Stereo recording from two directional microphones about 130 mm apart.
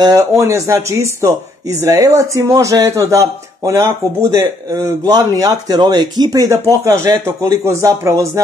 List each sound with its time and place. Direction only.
0.0 s speech: 25° right (ahead or behind)